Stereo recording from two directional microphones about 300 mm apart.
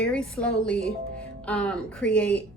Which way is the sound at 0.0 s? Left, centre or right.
Centre.